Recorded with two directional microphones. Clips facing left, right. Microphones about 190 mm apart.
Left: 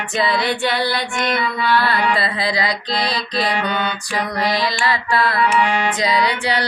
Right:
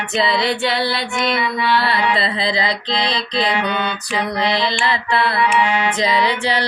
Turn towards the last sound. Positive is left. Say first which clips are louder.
# right 1 dB
turn(degrees=-25)  # may be behind; listen again after turning